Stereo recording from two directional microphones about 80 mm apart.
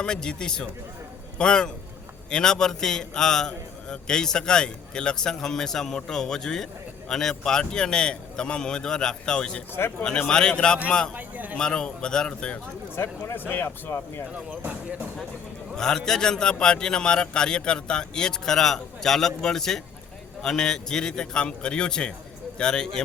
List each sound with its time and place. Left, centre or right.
0.0 s a man's voice: centre
11.1 s a man's voice: right
11.5 s a man's voice: centre
13.0 s speech: left
14.3 s speech: centre
15.7 s a man's voice: centre